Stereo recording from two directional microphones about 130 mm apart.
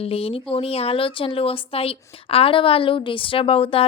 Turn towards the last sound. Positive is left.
turn(degrees=45)  # may be behind; listen again after turning